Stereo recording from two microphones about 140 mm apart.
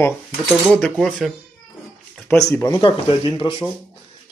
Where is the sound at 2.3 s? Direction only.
20° left (ahead or behind).